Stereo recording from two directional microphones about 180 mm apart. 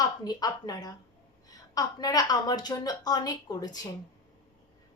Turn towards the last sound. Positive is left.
turn(degrees=20)  # may be behind; listen again after turning